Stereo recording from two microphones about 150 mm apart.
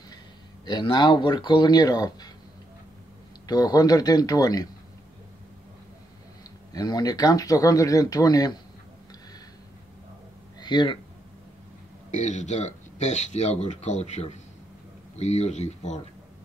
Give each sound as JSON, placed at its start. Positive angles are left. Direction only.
{"t": 0.7, "sound": "speech", "side_deg": 30}
{"t": 3.4, "sound": "speech", "side_deg": 25}
{"t": 6.7, "sound": "speech", "side_deg": 25}
{"t": 10.6, "sound": "speech", "side_deg": 30}
{"t": 12.1, "sound": "speech", "side_deg": 50}